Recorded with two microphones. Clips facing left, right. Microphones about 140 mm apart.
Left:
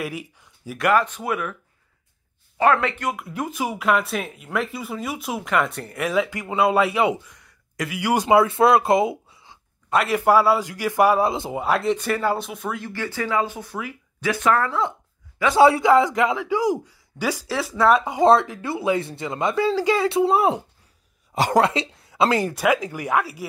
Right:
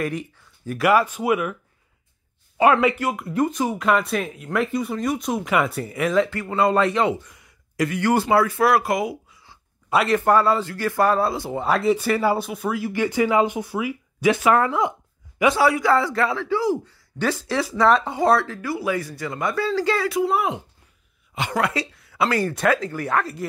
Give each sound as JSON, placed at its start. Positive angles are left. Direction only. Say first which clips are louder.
{"t": 0.0, "sound": "a man's voice", "louder": "right 4 dB", "side_deg": 5}
{"t": 0.7, "sound": "speech", "louder": "right 1 dB", "side_deg": -5}
{"t": 7.2, "sound": "a sound", "louder": "right 1 dB", "side_deg": 0}
{"t": 8.0, "sound": "speech", "louder": "left 2 dB", "side_deg": 15}
{"t": 10.0, "sound": "a man's voice", "louder": "left 1 dB", "side_deg": 10}
{"t": 11.6, "sound": "speech", "louder": "right 2 dB", "side_deg": 0}
{"t": 12.9, "sound": "speech", "louder": "right 5 dB", "side_deg": -15}
{"t": 14.5, "sound": "a sound", "louder": "right 2 dB", "side_deg": -15}
{"t": 15.5, "sound": "a man's voice", "louder": "left 7 dB", "side_deg": 25}
{"t": 20.1, "sound": "a man's voice", "louder": "left 3 dB", "side_deg": 25}